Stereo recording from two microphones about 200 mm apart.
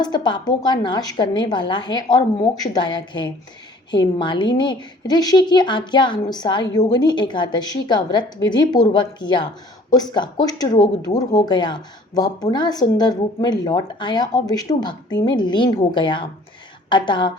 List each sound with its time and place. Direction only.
0.0 s speech: 20° left (ahead or behind)